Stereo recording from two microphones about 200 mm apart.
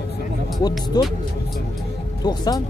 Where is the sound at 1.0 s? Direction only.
20° left (ahead or behind).